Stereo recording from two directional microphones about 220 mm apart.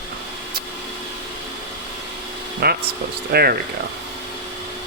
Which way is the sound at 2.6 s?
45° right (ahead or behind).